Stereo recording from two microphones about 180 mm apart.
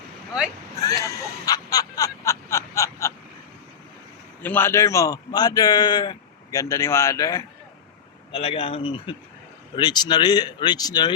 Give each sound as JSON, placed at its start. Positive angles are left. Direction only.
{"t": 0.8, "sound": "a sound", "side_deg": 20}
{"t": 4.4, "sound": "a man's voice", "side_deg": 10}
{"t": 8.3, "sound": "a man's voice", "side_deg": 30}